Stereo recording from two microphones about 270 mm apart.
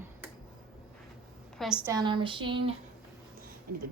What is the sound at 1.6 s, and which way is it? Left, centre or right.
Speech, centre.